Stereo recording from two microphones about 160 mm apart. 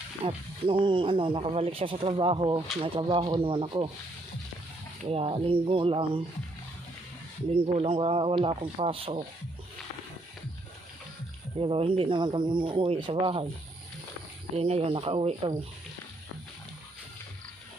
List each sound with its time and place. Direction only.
0.3 s speech: 35° right (ahead or behind)
5.1 s speech: 35° right (ahead or behind)
7.5 s speech: 35° right (ahead or behind)
11.6 s speech: 35° right (ahead or behind)
14.5 s speech: 40° right (ahead or behind)